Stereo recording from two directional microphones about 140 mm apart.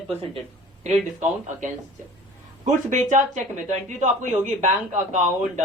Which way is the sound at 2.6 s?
60° right (ahead or behind).